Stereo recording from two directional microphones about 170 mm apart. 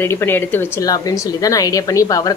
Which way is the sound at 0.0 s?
15° left (ahead or behind).